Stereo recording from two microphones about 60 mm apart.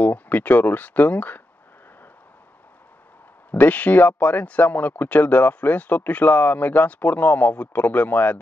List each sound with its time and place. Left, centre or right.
0.0 s speech: left
3.5 s speech: left